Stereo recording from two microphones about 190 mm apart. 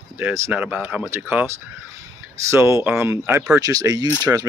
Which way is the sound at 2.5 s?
15° right (ahead or behind).